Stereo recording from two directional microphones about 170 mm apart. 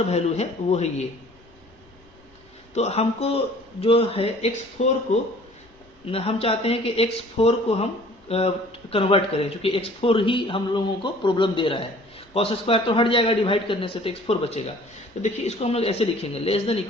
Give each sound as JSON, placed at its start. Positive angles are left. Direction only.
{"t": 0.0, "sound": "speech", "side_deg": 40}
{"t": 2.7, "sound": "speech", "side_deg": 40}
{"t": 6.1, "sound": "speech", "side_deg": 35}